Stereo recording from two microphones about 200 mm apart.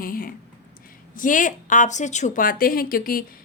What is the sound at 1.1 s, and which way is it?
A woman's voice, 40° left (ahead or behind).